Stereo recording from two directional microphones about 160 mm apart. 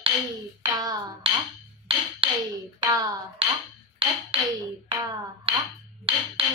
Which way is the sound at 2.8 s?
25° right (ahead or behind).